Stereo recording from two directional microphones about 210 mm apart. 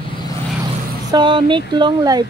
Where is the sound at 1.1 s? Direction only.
25° right (ahead or behind).